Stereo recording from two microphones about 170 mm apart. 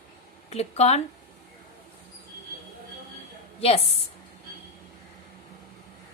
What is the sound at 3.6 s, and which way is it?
Speech, 35° left (ahead or behind).